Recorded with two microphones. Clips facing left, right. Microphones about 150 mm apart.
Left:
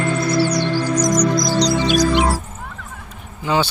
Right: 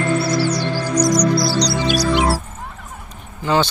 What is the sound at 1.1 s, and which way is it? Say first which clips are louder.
Music: right 2 dB; 35° right (ahead or behind).